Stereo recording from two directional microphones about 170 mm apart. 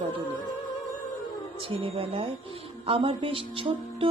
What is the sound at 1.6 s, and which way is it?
Music, 30° right (ahead or behind).